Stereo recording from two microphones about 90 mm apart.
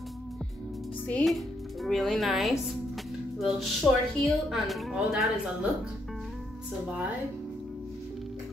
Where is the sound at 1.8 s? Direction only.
Centre (ahead or behind).